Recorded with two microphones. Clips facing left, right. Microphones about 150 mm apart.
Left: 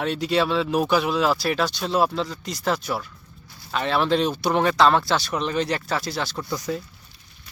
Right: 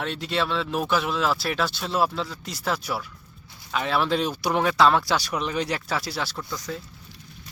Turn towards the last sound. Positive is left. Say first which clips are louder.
# left 5 dB
turn(degrees=10)  # may be behind; listen again after turning